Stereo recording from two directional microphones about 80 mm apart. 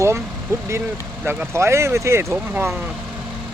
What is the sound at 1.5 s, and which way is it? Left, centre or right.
Speech, right.